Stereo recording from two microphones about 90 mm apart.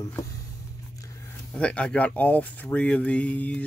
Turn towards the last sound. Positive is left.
turn(degrees=15)  # may be behind; listen again after turning